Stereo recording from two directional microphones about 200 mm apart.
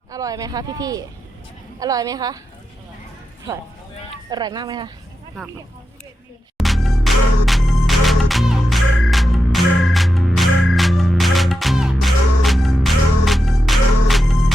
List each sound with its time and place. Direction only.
0.1 s speech: 15° right (ahead or behind)
4.3 s speech: 20° right (ahead or behind)
5.4 s speech: 5° left (ahead or behind)
6.6 s music: centre (ahead or behind)